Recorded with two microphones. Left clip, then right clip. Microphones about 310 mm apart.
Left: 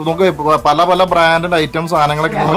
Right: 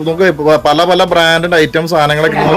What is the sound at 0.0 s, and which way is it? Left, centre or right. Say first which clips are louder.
A man's voice: right 3 dB; centre.